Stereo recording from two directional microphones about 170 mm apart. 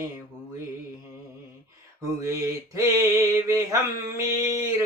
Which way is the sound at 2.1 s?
20° right (ahead or behind).